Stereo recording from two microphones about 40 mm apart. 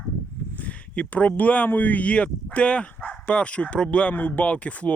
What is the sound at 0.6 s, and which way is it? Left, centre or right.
Speech, left.